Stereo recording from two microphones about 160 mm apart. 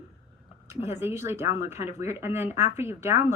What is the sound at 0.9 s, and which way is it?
Speech, 15° right (ahead or behind).